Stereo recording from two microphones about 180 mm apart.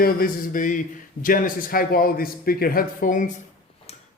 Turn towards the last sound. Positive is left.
turn(degrees=45)  # may be behind; listen again after turning